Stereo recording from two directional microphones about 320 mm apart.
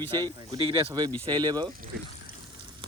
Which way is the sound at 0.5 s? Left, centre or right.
Centre.